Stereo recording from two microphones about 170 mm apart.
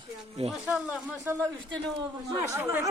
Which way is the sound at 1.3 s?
15° right (ahead or behind).